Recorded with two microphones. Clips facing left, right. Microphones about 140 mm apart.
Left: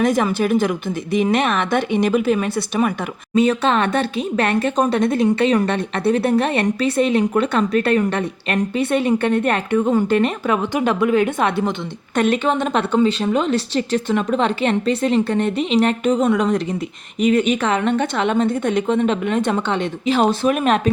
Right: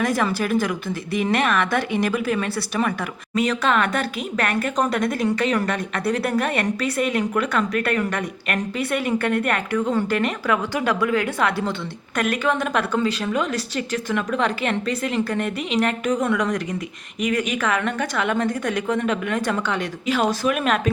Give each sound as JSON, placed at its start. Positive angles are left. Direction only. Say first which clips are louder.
{"t": 0.0, "sound": "speech", "louder": "left 4 dB", "side_deg": 20}